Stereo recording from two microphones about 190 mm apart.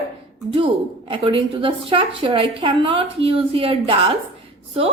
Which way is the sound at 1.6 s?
30° right (ahead or behind).